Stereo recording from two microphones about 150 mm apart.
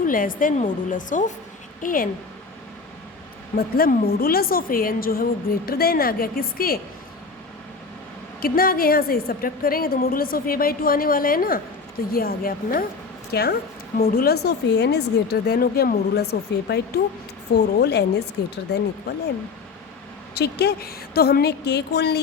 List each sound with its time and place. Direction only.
0.1 s speech: 65° left (ahead or behind)
3.8 s a woman's voice: 80° left
8.4 s a woman's voice: 75° left (ahead or behind)
13.3 s a woman's voice: 90° left
20.3 s a woman's voice: 90° left